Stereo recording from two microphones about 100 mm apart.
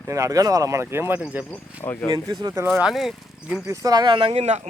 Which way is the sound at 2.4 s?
30° right (ahead or behind).